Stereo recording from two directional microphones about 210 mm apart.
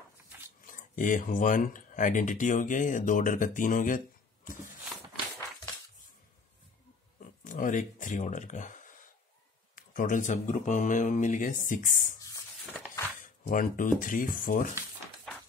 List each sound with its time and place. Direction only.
0.6 s speech: 40° left (ahead or behind)
7.2 s speech: 40° left (ahead or behind)
13.2 s speech: 40° left (ahead or behind)